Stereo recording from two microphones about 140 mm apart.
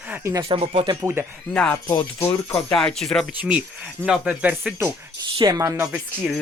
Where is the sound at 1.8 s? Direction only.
20° left (ahead or behind).